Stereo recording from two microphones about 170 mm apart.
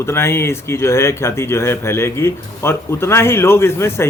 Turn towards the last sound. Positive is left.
turn(degrees=15)  # may be behind; listen again after turning